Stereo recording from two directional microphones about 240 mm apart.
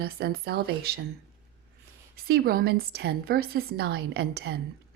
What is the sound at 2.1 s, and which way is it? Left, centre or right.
Speech, right.